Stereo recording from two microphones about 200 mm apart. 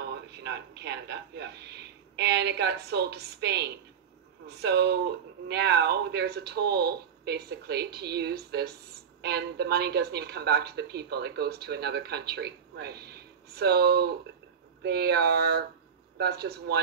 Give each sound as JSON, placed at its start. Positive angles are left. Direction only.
{"t": 0.4, "sound": "a woman's voice", "side_deg": -55}